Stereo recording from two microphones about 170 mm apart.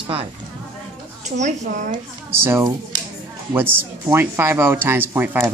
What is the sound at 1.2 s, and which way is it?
Speech, 45° right (ahead or behind).